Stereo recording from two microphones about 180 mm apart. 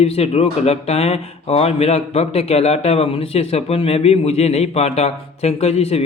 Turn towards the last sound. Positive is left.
turn(degrees=35)  # may be behind; listen again after turning